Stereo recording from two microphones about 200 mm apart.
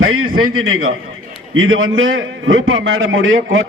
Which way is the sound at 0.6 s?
90° right.